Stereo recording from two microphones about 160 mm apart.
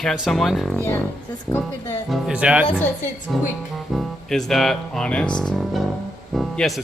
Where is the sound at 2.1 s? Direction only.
5° right (ahead or behind).